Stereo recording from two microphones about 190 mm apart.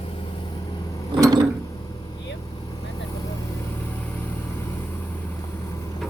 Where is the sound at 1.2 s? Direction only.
20° right (ahead or behind).